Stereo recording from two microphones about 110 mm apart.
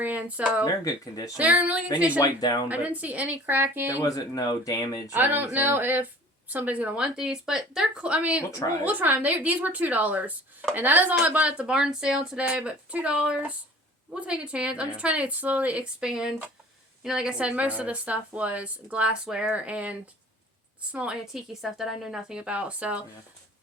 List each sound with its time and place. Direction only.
0.0 s speech: 15° right (ahead or behind)
0.6 s speech: 35° left (ahead or behind)
1.4 s speech: 15° right (ahead or behind)
2.1 s speech: 35° left (ahead or behind)
2.6 s speech: 15° right (ahead or behind)
4.1 s speech: 35° left (ahead or behind)
5.1 s speech: 15° right (ahead or behind)